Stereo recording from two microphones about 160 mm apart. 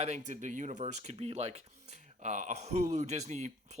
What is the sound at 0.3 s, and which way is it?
Speech, 50° right (ahead or behind).